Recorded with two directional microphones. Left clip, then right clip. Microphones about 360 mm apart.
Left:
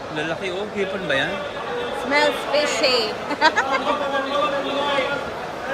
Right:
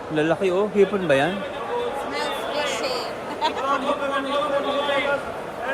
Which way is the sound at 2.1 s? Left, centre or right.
Left.